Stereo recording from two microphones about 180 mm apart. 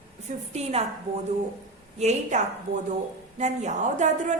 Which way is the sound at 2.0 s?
40° right (ahead or behind).